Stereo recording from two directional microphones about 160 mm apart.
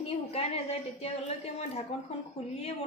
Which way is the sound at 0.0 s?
40° left (ahead or behind).